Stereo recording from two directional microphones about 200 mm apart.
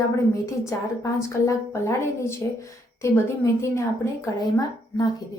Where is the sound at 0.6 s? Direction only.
15° left (ahead or behind).